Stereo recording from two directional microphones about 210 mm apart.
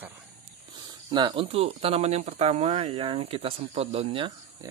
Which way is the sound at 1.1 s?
20° right (ahead or behind).